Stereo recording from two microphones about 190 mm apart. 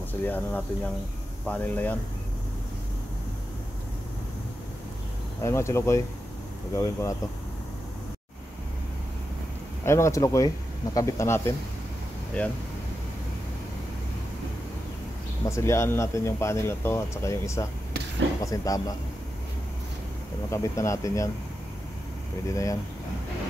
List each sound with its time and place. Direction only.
0.2 s speech: 10° left (ahead or behind)
5.4 s speech: 15° left (ahead or behind)
9.8 s speech: 15° left (ahead or behind)
15.5 s speech: 15° left (ahead or behind)
20.4 s speech: 15° left (ahead or behind)
22.5 s speech: 15° left (ahead or behind)